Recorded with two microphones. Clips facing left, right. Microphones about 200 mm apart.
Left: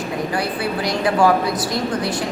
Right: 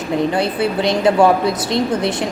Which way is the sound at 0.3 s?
25° right (ahead or behind).